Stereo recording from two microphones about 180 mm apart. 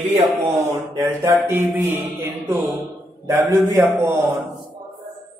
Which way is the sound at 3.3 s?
15° right (ahead or behind).